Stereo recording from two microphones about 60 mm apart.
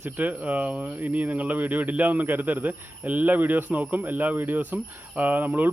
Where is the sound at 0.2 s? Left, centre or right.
Right.